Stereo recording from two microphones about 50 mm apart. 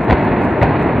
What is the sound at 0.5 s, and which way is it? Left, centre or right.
Vehicle, centre.